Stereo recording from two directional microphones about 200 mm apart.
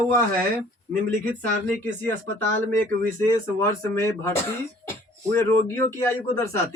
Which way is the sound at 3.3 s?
15° left (ahead or behind).